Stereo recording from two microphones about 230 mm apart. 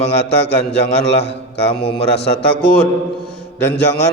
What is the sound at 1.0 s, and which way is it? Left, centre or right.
A man's voice, left.